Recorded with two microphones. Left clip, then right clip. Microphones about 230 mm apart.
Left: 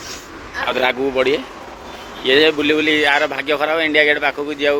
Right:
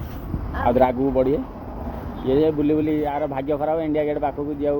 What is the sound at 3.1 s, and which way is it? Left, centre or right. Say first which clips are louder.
Speech: left 7 dB; left.